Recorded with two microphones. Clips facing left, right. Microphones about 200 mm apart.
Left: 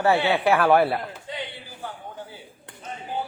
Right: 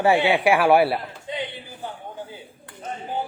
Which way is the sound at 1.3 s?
20° right (ahead or behind).